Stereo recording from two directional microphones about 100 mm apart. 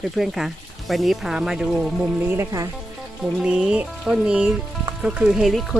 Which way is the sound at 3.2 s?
10° right (ahead or behind).